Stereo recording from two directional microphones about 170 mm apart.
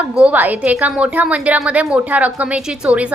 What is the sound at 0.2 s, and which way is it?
A woman's voice, 10° right (ahead or behind).